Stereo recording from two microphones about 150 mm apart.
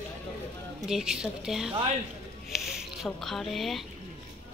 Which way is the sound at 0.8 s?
5° right (ahead or behind).